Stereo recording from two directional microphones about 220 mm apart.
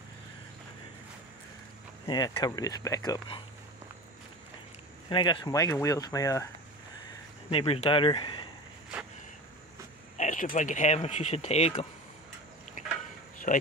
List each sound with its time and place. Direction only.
2.0 s speech: 20° left (ahead or behind)
5.1 s speech: 20° left (ahead or behind)
7.4 s speech: 25° left (ahead or behind)
10.1 s speech: 35° left (ahead or behind)
13.5 s speech: 35° left (ahead or behind)